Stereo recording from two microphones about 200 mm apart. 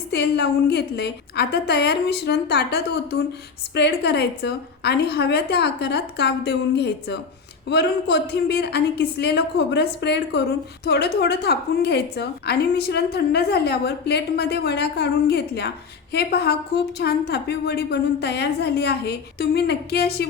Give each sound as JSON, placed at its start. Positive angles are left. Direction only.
{"t": 0.1, "sound": "a woman's voice", "side_deg": 55}